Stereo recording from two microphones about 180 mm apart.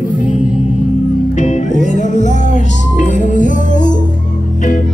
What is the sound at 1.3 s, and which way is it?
Music, 45° left (ahead or behind).